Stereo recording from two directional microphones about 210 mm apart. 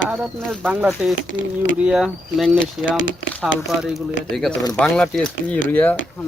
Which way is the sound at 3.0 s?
65° left (ahead or behind).